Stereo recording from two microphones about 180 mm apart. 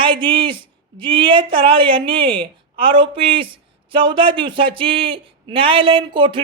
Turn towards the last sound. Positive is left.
turn(degrees=-25)  # may be behind; listen again after turning